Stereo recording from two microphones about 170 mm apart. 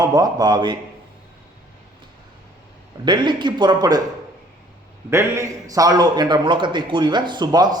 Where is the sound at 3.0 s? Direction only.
25° right (ahead or behind).